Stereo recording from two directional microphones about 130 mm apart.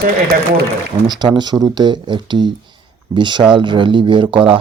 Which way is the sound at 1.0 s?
35° right (ahead or behind).